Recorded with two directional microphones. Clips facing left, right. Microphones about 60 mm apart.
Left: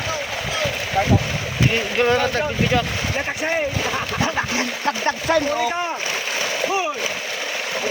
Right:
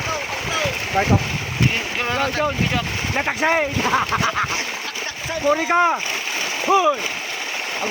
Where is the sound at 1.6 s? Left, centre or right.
Centre.